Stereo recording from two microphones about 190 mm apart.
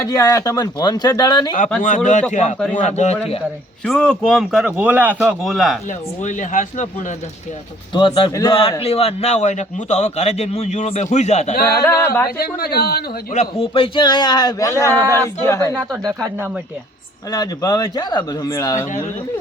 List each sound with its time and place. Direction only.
0.0 s a man's voice: 20° left (ahead or behind)
2.3 s a man's voice: 40° left (ahead or behind)
3.8 s a man's voice: 5° left (ahead or behind)
6.2 s a man's voice: 40° left (ahead or behind)
7.9 s a man's voice: 25° left (ahead or behind)
8.8 s a man's voice: 30° left (ahead or behind)
11.6 s a sound: 15° left (ahead or behind)
12.4 s speech: 50° left (ahead or behind)
13.3 s a man's voice: 35° left (ahead or behind); by 15.7 s 15° left (ahead or behind)
15.7 s a man's voice: centre (ahead or behind)
17.3 s a man's voice: 20° left (ahead or behind)